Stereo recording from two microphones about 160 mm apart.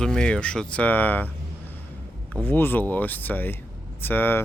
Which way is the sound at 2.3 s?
10° left (ahead or behind).